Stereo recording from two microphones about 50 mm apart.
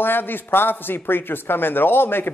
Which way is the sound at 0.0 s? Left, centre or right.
Left.